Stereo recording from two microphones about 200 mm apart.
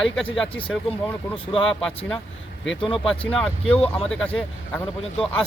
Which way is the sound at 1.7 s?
5° left (ahead or behind).